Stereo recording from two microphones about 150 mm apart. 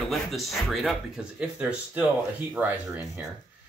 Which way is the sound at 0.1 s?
Centre (ahead or behind).